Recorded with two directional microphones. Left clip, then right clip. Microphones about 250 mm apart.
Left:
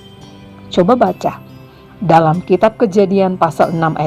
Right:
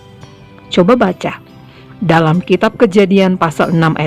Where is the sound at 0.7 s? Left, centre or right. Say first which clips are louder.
Right 1 dB; right.